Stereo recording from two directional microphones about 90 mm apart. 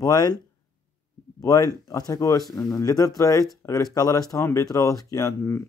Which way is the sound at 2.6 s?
35° left (ahead or behind).